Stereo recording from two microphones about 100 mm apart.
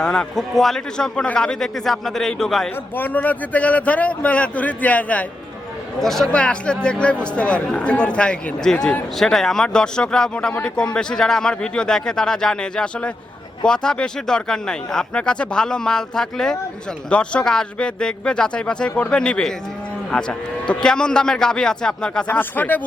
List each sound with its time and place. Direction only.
0.0 s a man's voice: 10° left (ahead or behind)
2.9 s speech: 15° left (ahead or behind)
6.0 s speech: 5° left (ahead or behind)
22.3 s speech: 20° left (ahead or behind)